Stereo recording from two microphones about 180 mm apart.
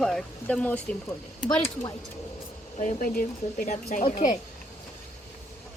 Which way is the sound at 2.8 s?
55° left (ahead or behind).